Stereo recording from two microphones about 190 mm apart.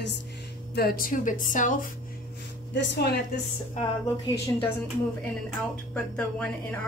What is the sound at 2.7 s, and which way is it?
Speech, 70° left (ahead or behind).